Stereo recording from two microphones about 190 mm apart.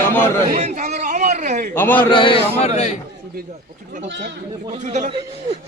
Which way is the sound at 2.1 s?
25° left (ahead or behind).